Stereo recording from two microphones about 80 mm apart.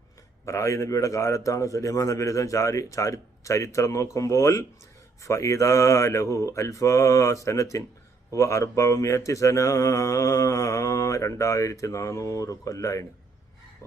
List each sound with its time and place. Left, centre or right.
0.4 s mantra: left